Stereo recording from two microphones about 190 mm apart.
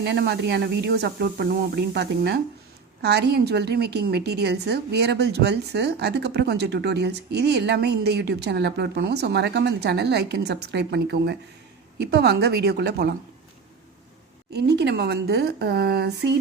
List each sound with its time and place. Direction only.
0.0 s a woman's voice: 65° right (ahead or behind)
14.5 s a woman's voice: 60° right (ahead or behind)